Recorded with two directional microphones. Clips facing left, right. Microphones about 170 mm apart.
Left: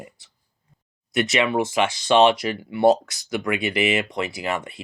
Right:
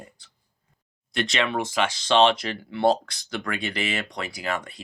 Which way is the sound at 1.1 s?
5° left (ahead or behind).